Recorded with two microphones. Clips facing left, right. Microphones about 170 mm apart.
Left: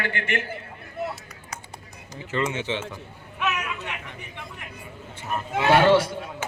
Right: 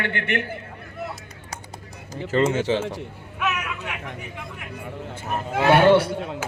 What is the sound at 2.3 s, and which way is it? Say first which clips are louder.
Speech: right 6 dB; 40° right (ahead or behind).